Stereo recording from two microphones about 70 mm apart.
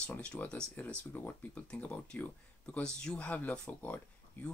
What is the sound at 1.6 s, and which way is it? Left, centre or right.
Speech, centre.